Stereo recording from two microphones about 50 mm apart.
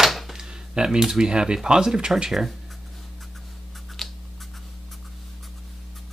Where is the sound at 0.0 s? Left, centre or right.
Centre.